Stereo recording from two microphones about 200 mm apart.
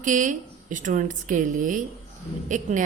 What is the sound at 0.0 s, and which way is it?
A woman's voice, 40° right (ahead or behind).